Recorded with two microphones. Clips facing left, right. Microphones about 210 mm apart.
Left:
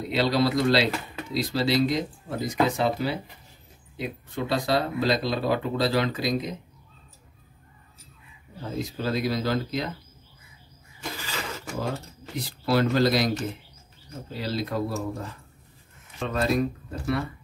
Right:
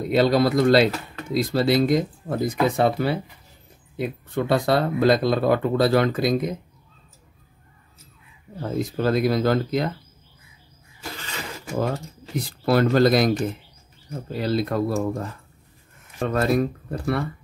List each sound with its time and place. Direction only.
0.0 s speech: 50° right (ahead or behind)
8.5 s speech: 55° right (ahead or behind)
11.9 s speech: 50° right (ahead or behind)